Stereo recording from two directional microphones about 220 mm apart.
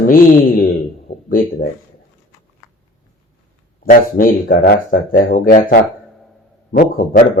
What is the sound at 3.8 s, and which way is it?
A man's voice, 40° left (ahead or behind).